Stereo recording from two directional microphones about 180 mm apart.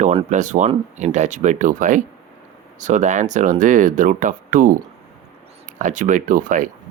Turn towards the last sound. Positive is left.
turn(degrees=-45)  # may be behind; listen again after turning